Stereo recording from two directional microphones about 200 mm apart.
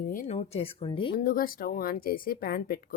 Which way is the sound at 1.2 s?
45° left (ahead or behind).